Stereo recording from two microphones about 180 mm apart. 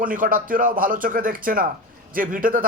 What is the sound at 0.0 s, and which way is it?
Speech, 50° right (ahead or behind).